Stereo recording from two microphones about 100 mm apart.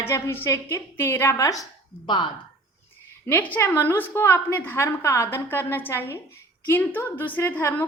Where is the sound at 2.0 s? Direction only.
50° left (ahead or behind).